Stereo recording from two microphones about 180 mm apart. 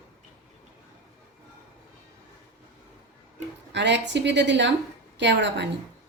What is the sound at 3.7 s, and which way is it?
A woman's voice, 80° right.